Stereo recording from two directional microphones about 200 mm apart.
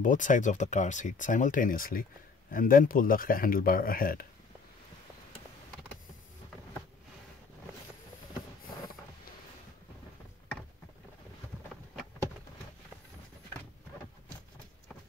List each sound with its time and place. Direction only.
0.0 s speech: 40° left (ahead or behind)